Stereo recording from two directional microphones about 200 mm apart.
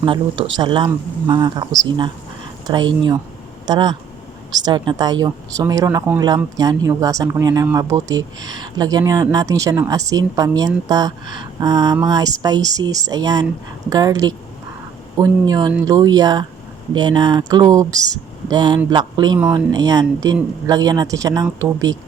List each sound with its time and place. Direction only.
0.0 s speech: 25° right (ahead or behind)